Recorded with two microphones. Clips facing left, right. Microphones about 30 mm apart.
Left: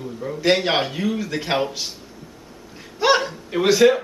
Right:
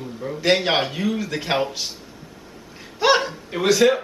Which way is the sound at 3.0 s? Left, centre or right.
Centre.